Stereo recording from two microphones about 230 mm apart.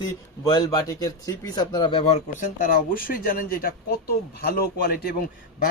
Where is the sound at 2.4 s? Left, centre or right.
Left.